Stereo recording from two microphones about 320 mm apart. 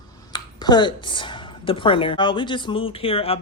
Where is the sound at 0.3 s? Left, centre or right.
Centre.